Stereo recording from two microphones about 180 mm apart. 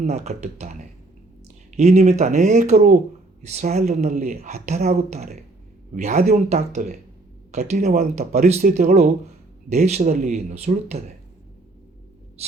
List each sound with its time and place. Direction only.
0.0 s speech: 40° right (ahead or behind); by 9.0 s 55° right (ahead or behind)
9.6 s speech: 40° right (ahead or behind)
12.4 s speech: 35° right (ahead or behind)